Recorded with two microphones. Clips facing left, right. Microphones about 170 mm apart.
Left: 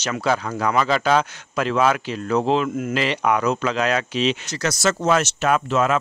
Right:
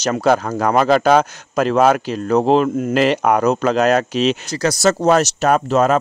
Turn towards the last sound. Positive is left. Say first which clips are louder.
# right 5 dB
turn(degrees=-40)  # may be behind; listen again after turning